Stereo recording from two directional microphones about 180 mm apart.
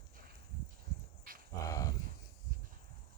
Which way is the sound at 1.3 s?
50° right (ahead or behind).